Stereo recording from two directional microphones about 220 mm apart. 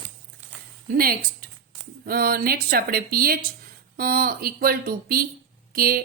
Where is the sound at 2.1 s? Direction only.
40° right (ahead or behind).